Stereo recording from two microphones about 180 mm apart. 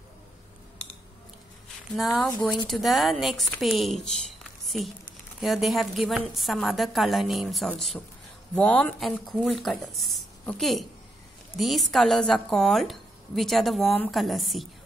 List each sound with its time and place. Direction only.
2.0 s speech: centre (ahead or behind)